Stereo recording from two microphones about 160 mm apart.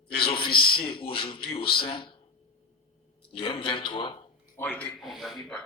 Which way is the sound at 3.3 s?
30° left (ahead or behind).